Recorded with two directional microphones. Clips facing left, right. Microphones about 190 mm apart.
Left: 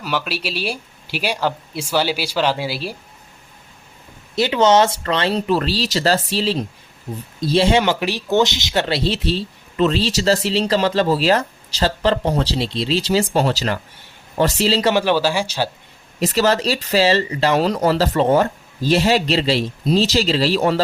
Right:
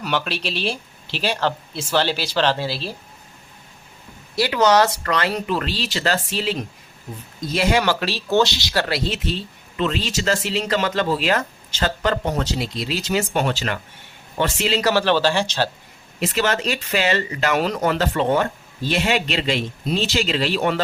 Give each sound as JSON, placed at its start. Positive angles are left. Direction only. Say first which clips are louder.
{"t": 0.0, "sound": "speech", "louder": "even", "side_deg": 5}
{"t": 4.4, "sound": "speech", "louder": "left 2 dB", "side_deg": 25}
{"t": 14.9, "sound": "speech", "louder": "left 1 dB", "side_deg": 10}
{"t": 16.2, "sound": "speech", "louder": "left 4 dB", "side_deg": 40}